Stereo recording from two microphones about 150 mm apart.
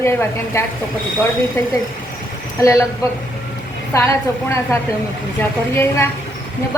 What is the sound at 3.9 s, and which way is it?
A woman's voice, 20° left (ahead or behind).